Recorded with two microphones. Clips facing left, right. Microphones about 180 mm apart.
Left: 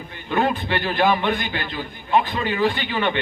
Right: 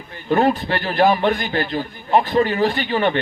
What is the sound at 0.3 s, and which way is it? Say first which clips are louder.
A man's voice: right 4 dB; 40° right (ahead or behind).